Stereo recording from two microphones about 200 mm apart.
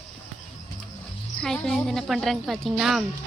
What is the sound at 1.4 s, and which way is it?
A woman's voice, 5° left (ahead or behind).